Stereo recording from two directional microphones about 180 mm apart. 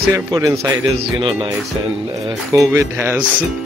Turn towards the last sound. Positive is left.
turn(degrees=-10)  # may be behind; listen again after turning